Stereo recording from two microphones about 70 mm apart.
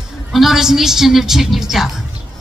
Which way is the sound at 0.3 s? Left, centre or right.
Centre.